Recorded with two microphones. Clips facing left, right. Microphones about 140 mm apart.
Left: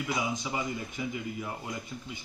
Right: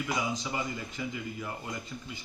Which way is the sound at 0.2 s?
15° left (ahead or behind).